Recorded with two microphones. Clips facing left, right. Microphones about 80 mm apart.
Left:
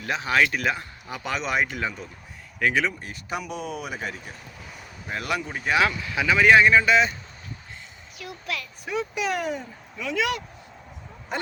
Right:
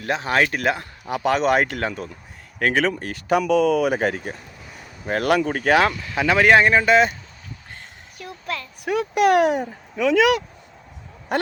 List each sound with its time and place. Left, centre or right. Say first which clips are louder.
0.0 s speech: right 2 dB; right
2.6 s speech: right 4 dB; right
2.9 s speech: right 11 dB; right
8.2 s a sound: right 3 dB; right
8.8 s speech: right 10 dB; right
11.3 s speech: right 8 dB; right